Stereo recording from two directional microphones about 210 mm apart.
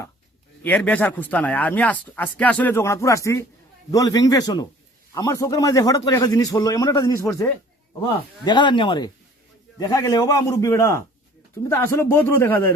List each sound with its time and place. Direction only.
0.6 s speech: 5° left (ahead or behind)